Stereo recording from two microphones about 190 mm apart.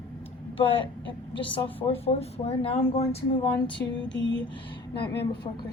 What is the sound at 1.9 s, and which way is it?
Speech, 30° left (ahead or behind).